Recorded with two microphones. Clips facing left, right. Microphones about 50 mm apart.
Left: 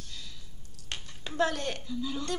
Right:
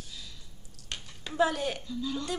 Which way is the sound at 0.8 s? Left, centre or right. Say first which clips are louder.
Left 1 dB; centre.